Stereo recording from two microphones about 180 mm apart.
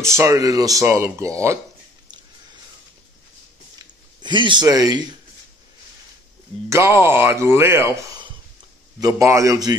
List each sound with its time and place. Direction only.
0.0 s speech: 15° right (ahead or behind)
3.7 s a sound: 25° right (ahead or behind)
6.7 s speech: 15° right (ahead or behind)
9.0 s speech: 15° right (ahead or behind)